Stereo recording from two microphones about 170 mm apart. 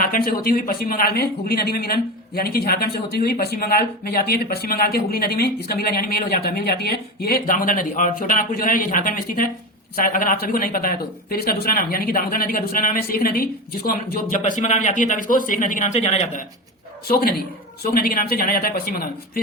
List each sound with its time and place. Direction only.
0.0 s speech: 60° left (ahead or behind); by 16.4 s 40° left (ahead or behind)
17.1 s speech: 65° left (ahead or behind)